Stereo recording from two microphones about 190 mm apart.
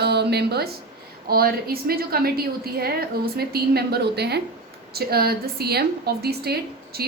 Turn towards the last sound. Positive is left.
turn(degrees=-55)  # may be behind; listen again after turning